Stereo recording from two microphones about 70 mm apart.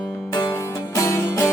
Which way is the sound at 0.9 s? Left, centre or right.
Left.